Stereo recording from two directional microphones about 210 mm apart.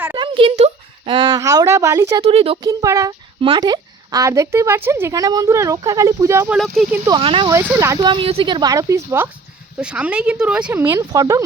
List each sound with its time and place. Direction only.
0.2 s a sound: 25° right (ahead or behind)
2.2 s speech: 25° right (ahead or behind)
6.6 s speech: centre (ahead or behind)
7.0 s speech: 20° right (ahead or behind)